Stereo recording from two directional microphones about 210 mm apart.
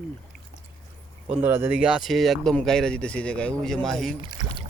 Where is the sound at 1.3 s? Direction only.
10° right (ahead or behind).